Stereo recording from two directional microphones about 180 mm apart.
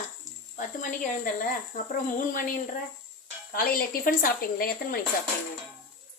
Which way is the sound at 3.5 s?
55° left (ahead or behind).